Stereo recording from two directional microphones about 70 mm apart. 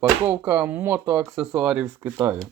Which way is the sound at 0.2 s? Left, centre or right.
Right.